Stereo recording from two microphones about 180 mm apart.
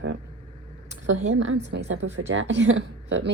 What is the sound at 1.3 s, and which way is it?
A woman's voice, 85° right.